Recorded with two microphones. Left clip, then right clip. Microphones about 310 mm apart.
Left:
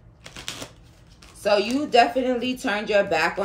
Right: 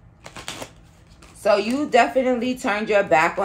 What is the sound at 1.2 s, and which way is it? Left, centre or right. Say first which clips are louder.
A woman's voice: right 2 dB; centre.